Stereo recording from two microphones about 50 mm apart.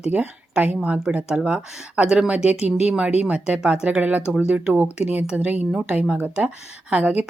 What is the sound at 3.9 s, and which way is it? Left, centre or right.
Speech, right.